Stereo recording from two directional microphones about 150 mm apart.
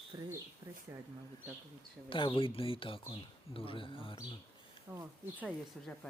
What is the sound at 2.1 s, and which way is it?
Speech, 35° left (ahead or behind).